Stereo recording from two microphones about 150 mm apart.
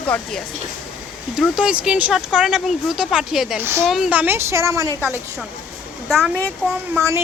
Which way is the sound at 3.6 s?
15° right (ahead or behind).